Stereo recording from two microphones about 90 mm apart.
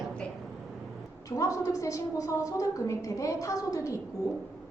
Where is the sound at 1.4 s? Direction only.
35° left (ahead or behind).